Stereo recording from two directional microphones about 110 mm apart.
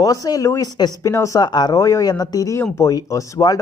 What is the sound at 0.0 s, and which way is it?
Speech, 35° left (ahead or behind).